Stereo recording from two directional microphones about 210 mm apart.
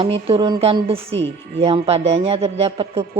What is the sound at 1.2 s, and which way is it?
Speech, 55° right (ahead or behind).